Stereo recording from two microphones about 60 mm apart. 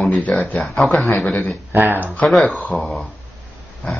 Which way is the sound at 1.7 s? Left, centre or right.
Right.